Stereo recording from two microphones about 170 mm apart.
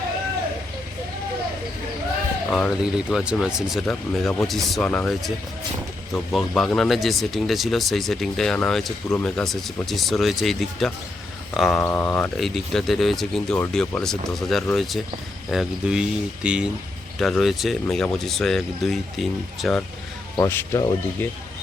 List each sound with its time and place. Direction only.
2.5 s speech: centre (ahead or behind)
11.8 s speech: 15° left (ahead or behind)
20.3 s speech: 15° left (ahead or behind)